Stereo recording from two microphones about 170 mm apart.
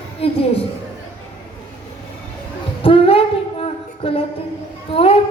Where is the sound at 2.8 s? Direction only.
30° left (ahead or behind).